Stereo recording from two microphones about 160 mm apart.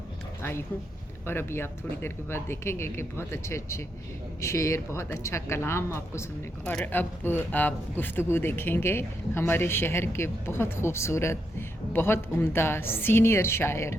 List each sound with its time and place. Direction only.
1.3 s speech: 15° left (ahead or behind)